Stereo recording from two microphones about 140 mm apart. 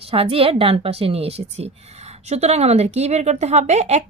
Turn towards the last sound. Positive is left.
turn(degrees=-50)  # may be behind; listen again after turning